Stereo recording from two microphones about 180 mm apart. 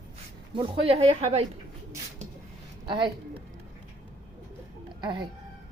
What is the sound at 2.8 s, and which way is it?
Speech, 25° right (ahead or behind).